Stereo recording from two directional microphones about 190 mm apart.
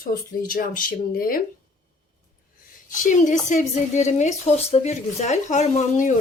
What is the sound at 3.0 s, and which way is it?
A woman's voice, 40° left (ahead or behind).